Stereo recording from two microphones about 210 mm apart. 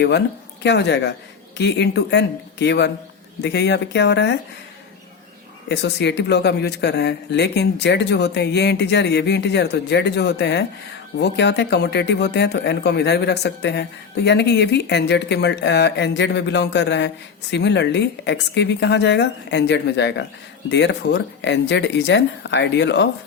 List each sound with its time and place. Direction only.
0.6 s speech: 55° left (ahead or behind)
5.6 s speech: 55° left (ahead or behind)